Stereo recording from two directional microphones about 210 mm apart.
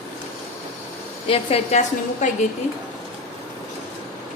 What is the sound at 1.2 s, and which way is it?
A woman's voice, 30° left (ahead or behind).